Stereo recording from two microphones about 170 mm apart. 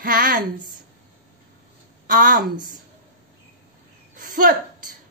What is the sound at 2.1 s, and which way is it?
Speech, 55° right (ahead or behind).